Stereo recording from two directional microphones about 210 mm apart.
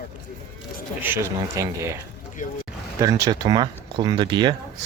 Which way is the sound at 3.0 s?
15° right (ahead or behind).